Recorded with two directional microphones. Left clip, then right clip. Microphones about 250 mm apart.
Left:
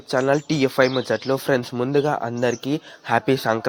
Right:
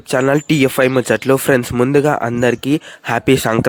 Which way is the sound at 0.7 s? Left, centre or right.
Right.